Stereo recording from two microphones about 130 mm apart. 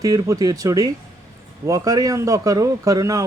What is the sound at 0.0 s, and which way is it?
A man's voice, 25° right (ahead or behind).